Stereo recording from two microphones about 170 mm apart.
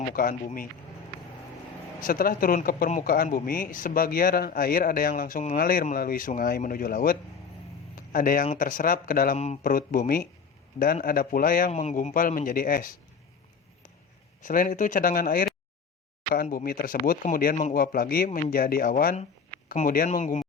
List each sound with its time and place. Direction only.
0.1 s speech: 55° left (ahead or behind)
2.0 s a man's voice: 55° left (ahead or behind)
9.4 s speech: 40° left (ahead or behind)
9.7 s a man's voice: 55° left (ahead or behind)
14.4 s a man's voice: 55° left (ahead or behind)
18.3 s speech: 40° left (ahead or behind)
18.5 s a man's voice: 60° left (ahead or behind)